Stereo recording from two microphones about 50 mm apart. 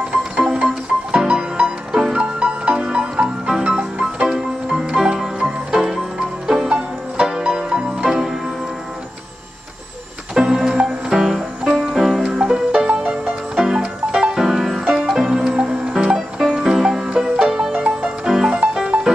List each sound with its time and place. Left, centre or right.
0.1 s music: centre
10.3 s music: centre
17.7 s music: right
18.2 s music: centre